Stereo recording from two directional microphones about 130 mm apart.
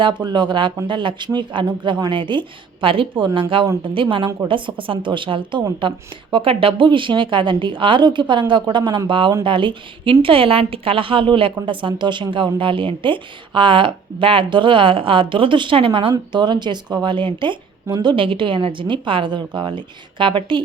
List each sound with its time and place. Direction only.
0.0 s a woman's voice: 35° right (ahead or behind)